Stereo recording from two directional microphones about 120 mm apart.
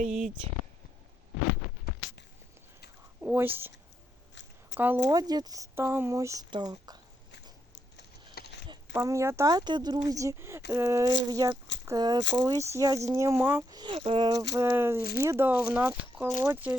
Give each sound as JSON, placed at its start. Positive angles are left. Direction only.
{"t": 0.0, "sound": "speech", "side_deg": -90}
{"t": 3.2, "sound": "speech", "side_deg": -15}
{"t": 5.0, "sound": "speech", "side_deg": -35}
{"t": 5.7, "sound": "speech", "side_deg": -20}
{"t": 8.9, "sound": "speech", "side_deg": -20}
{"t": 13.7, "sound": "speech", "side_deg": -40}
{"t": 14.5, "sound": "speech", "side_deg": -20}